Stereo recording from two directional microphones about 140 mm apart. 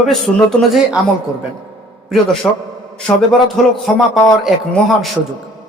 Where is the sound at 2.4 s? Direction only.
15° left (ahead or behind).